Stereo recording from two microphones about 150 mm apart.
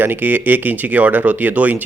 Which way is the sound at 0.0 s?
10° right (ahead or behind).